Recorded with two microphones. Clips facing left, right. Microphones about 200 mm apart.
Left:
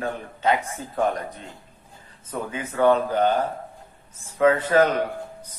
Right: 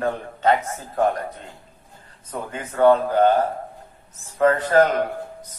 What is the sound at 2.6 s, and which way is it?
Speech, 45° right (ahead or behind).